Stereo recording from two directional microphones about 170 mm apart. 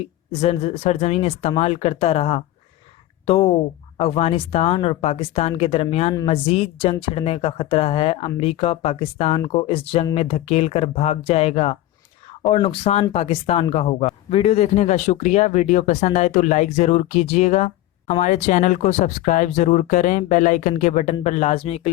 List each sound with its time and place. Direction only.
0.3 s speech: 35° left (ahead or behind)